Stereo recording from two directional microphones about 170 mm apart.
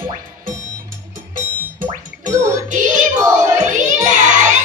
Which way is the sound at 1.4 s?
55° right (ahead or behind).